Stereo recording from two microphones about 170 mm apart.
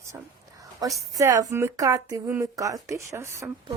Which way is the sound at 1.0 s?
20° right (ahead or behind).